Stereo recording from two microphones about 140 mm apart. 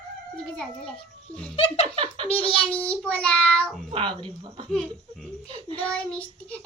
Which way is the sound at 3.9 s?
35° right (ahead or behind).